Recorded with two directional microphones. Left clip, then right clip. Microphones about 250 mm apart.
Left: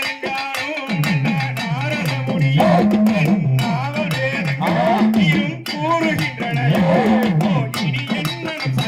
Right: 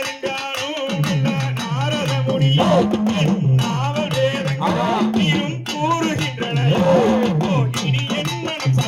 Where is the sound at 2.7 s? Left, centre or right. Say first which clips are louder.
Left 1 dB; right.